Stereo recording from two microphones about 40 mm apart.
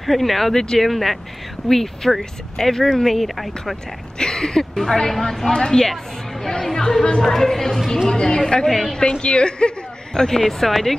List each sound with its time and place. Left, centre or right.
0.0 s speech: centre
4.2 s a sound: centre
4.7 s a woman's voice: centre
10.1 s speech: centre